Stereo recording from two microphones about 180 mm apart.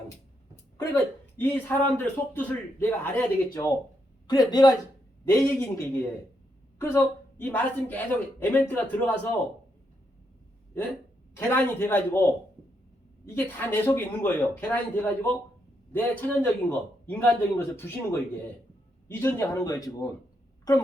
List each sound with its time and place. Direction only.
0.5 s a woman's voice: 15° left (ahead or behind)
11.3 s a woman's voice: 10° left (ahead or behind)
13.2 s a woman's voice: 10° left (ahead or behind)